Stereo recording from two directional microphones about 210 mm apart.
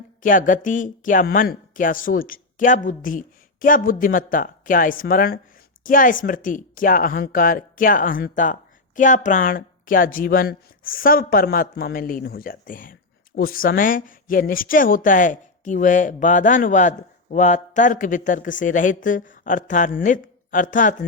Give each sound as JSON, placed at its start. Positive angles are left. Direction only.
{"t": 0.2, "sound": "a woman's voice", "side_deg": 40}